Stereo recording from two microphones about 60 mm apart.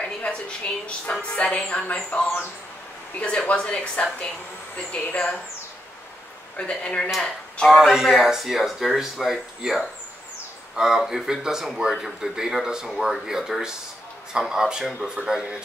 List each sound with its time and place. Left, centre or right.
0.0 s a woman's voice: centre
3.2 s a woman's voice: left
6.5 s speech: left
7.7 s speech: centre